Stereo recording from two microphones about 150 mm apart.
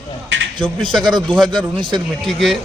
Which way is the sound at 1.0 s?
30° right (ahead or behind).